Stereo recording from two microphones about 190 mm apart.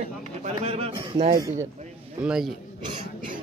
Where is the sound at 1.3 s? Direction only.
20° right (ahead or behind).